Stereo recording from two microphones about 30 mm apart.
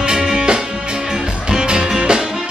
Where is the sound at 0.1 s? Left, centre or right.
Right.